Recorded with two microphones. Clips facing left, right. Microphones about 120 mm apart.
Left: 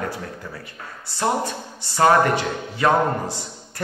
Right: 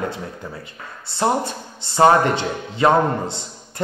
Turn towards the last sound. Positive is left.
turn(degrees=-25)  # may be behind; listen again after turning